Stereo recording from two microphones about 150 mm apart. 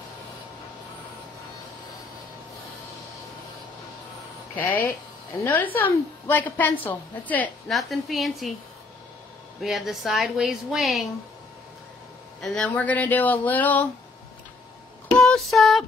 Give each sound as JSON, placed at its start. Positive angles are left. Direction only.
{"t": 4.6, "sound": "a woman's voice", "side_deg": 10}
{"t": 7.7, "sound": "a woman's voice", "side_deg": 0}
{"t": 9.6, "sound": "a woman's voice", "side_deg": 0}
{"t": 12.4, "sound": "a woman's voice", "side_deg": 5}
{"t": 15.1, "sound": "a sound", "side_deg": 5}